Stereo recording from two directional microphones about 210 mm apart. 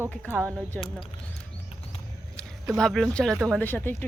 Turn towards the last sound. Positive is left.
turn(degrees=10)  # may be behind; listen again after turning